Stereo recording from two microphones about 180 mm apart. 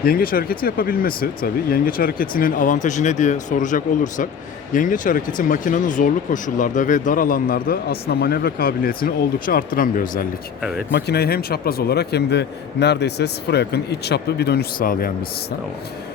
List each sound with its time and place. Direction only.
0.0 s speech: 55° left (ahead or behind)
10.6 s speech: centre (ahead or behind)
10.9 s a man's voice: 65° left (ahead or behind)